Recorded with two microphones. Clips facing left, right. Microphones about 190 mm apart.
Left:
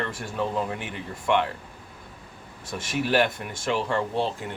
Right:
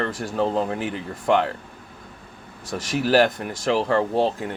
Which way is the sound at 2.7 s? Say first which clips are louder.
Right 5 dB; 40° right (ahead or behind).